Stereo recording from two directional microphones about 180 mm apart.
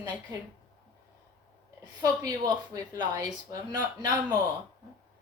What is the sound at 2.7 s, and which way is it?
Speech, 20° right (ahead or behind).